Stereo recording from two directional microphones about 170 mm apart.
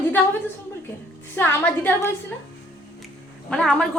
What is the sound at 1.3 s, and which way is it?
Speech, 10° left (ahead or behind).